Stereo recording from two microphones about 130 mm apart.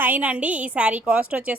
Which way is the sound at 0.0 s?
10° right (ahead or behind).